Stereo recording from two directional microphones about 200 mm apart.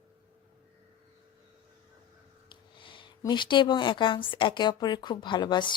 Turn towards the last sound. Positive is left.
turn(degrees=20)  # may be behind; listen again after turning